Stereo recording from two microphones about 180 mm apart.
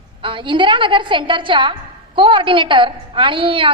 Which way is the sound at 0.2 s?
30° right (ahead or behind).